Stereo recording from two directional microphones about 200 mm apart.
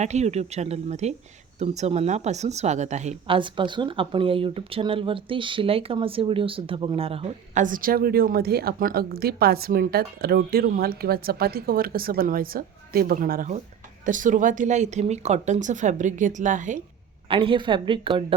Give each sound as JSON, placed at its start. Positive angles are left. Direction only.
{"t": 0.0, "sound": "a woman's voice", "side_deg": -35}
{"t": 17.2, "sound": "a woman's voice", "side_deg": -25}